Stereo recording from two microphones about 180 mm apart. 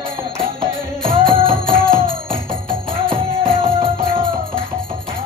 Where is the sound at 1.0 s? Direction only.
30° right (ahead or behind).